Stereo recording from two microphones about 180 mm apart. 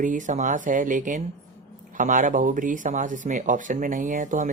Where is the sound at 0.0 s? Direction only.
45° right (ahead or behind).